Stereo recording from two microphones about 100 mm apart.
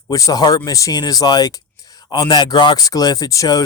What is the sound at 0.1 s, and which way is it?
Speech, 35° left (ahead or behind).